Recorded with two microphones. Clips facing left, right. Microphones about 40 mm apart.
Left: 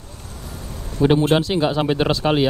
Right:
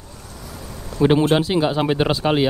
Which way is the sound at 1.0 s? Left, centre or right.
Right.